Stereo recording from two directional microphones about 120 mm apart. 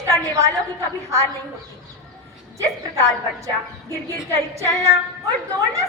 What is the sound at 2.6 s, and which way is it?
A woman's voice, 25° right (ahead or behind).